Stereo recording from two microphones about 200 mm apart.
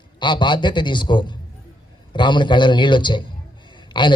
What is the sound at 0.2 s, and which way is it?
A man's voice, 25° left (ahead or behind).